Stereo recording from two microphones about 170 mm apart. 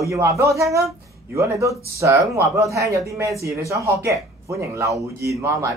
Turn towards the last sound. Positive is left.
turn(degrees=-15)  # may be behind; listen again after turning